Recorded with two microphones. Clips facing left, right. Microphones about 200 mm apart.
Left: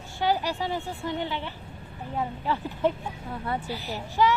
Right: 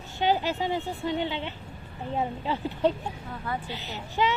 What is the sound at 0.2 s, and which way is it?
A woman's voice, 20° right (ahead or behind).